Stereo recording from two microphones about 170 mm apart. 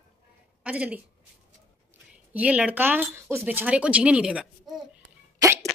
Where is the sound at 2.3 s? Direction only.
5° right (ahead or behind).